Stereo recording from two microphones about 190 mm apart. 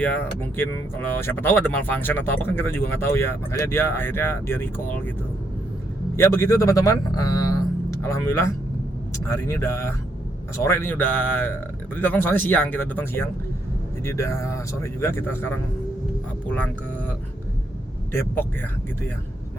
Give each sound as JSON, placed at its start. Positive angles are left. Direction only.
{"t": 0.0, "sound": "speech", "side_deg": 10}
{"t": 6.1, "sound": "speech", "side_deg": 15}
{"t": 18.1, "sound": "speech", "side_deg": 10}